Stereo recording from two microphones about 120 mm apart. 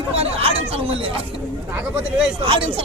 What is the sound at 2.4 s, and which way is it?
Speech, 45° right (ahead or behind).